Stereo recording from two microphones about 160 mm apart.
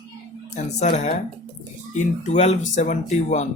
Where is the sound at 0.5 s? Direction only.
50° left (ahead or behind).